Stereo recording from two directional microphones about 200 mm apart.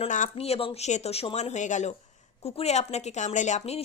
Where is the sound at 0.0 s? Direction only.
35° left (ahead or behind).